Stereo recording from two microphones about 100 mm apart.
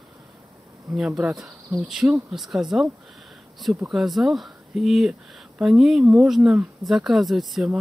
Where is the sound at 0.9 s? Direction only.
10° right (ahead or behind).